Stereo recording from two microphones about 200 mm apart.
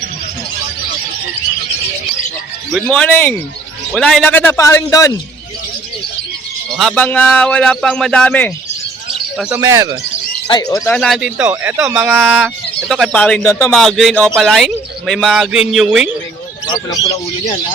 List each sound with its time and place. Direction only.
2.7 s a man's voice: 5° left (ahead or behind)
6.7 s a man's voice: 5° left (ahead or behind)
9.4 s speech: 10° right (ahead or behind)
10.5 s a man's voice: 20° left (ahead or behind)
10.9 s a man's voice: centre (ahead or behind)
12.9 s a man's voice: centre (ahead or behind)